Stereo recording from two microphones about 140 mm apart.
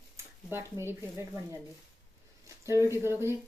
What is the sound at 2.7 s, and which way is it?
Speech, 20° right (ahead or behind).